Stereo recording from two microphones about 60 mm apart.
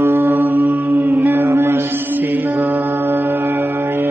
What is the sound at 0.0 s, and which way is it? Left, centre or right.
Mantra, right.